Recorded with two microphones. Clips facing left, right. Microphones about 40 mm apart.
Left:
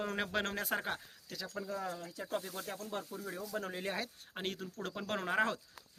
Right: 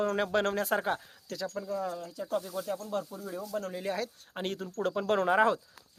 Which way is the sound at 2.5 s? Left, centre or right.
Left.